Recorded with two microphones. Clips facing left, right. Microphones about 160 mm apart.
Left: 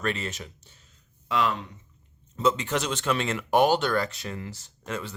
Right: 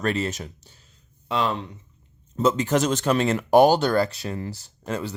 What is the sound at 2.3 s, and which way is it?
Speech, 40° right (ahead or behind).